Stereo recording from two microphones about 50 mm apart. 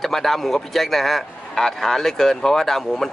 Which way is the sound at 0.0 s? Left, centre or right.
Centre.